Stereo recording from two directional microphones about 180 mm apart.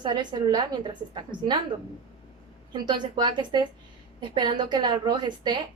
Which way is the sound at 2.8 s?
25° right (ahead or behind).